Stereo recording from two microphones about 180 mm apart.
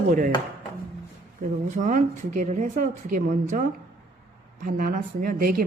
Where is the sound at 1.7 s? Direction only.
45° right (ahead or behind).